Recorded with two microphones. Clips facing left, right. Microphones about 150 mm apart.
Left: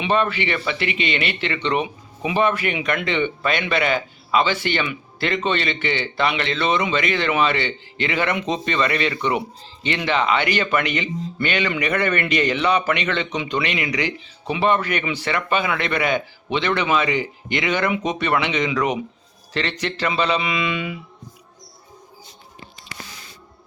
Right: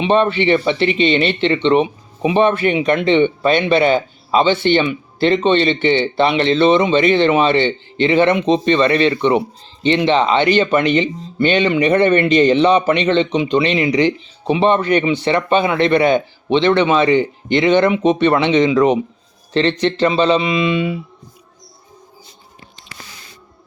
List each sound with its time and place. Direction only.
0.0 s speech: 25° right (ahead or behind)